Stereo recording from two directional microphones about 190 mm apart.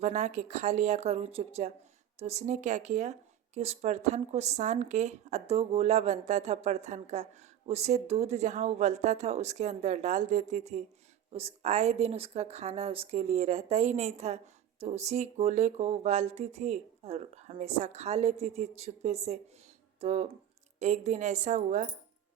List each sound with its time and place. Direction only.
0.0 s speech: 40° right (ahead or behind)